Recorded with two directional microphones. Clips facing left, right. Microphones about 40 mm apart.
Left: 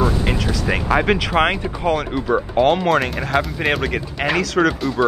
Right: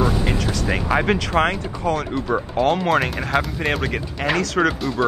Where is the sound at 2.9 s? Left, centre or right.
Centre.